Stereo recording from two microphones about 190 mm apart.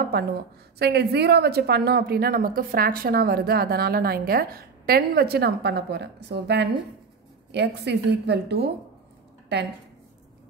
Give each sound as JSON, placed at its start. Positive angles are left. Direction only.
{"t": 0.0, "sound": "a woman's voice", "side_deg": -55}